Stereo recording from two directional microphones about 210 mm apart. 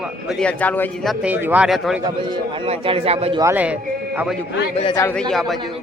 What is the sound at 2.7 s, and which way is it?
Speech, 30° right (ahead or behind).